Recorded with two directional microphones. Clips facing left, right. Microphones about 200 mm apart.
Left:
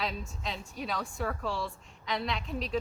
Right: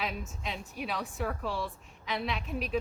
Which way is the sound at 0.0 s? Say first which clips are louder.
Left 1 dB; 5° right (ahead or behind).